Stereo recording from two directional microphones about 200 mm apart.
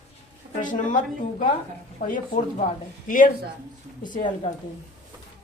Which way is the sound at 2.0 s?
50° left (ahead or behind).